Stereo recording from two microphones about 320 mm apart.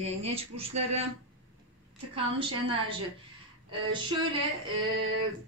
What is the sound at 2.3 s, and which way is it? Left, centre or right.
Speech, centre.